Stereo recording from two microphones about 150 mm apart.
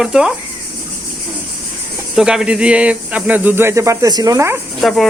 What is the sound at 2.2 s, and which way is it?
Speech, 5° right (ahead or behind).